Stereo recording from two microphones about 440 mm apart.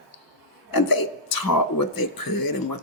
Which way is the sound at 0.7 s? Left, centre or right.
Left.